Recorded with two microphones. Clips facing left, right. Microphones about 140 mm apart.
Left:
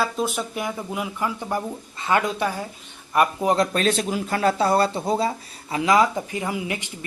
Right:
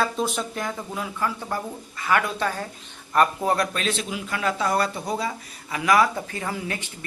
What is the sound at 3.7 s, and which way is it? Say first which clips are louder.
Speech: left 6 dB; 40° left (ahead or behind).